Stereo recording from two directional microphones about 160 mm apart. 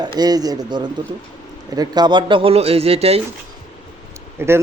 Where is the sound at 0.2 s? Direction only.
25° right (ahead or behind).